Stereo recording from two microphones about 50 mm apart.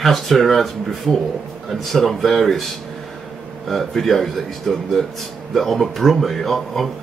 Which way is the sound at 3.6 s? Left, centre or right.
Centre.